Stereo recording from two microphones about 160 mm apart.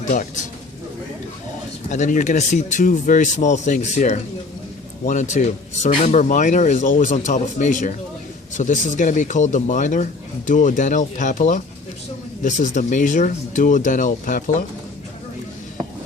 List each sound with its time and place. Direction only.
0.0 s a man's voice: 50° left (ahead or behind)
1.9 s a man's voice: 50° left (ahead or behind)